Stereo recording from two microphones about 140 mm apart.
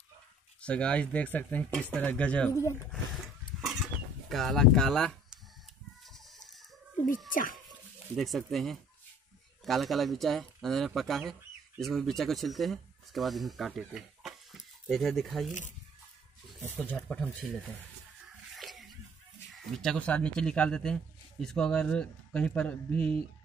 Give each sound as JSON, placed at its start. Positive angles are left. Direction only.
{"t": 0.6, "sound": "speech", "side_deg": 10}
{"t": 2.5, "sound": "speech", "side_deg": 20}
{"t": 3.6, "sound": "a sound", "side_deg": 0}
{"t": 6.1, "sound": "chicken", "side_deg": 0}
{"t": 7.3, "sound": "dog", "side_deg": 75}
{"t": 8.2, "sound": "speech", "side_deg": 0}
{"t": 16.6, "sound": "speech", "side_deg": 15}
{"t": 18.6, "sound": "a sound", "side_deg": 0}
{"t": 19.5, "sound": "speech", "side_deg": 0}